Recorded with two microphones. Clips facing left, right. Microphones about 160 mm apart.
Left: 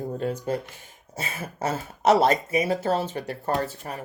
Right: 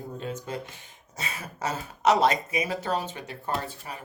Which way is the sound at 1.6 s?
45° left (ahead or behind).